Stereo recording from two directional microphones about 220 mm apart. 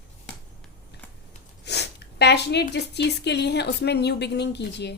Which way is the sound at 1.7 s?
50° left (ahead or behind).